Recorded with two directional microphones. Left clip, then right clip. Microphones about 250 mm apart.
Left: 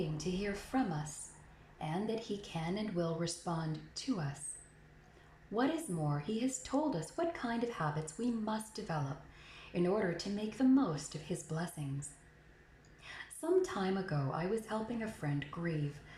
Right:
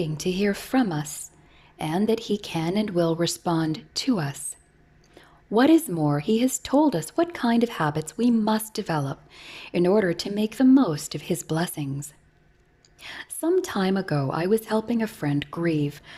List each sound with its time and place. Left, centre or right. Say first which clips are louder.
0.2 s speech: right 14 dB; right
5.5 s speech: right 16 dB; right
13.0 s speech: right 13 dB; right